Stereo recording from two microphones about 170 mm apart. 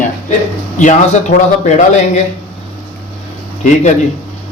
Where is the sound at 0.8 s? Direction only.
45° left (ahead or behind).